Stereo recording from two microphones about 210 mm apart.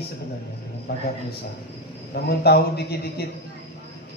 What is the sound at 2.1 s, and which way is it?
A man's voice, 50° left (ahead or behind).